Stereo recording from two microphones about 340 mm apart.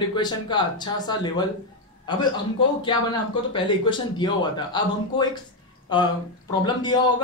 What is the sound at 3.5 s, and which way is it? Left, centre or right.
Speech, centre.